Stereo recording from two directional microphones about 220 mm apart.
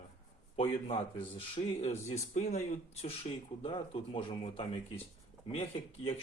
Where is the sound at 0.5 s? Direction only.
25° left (ahead or behind).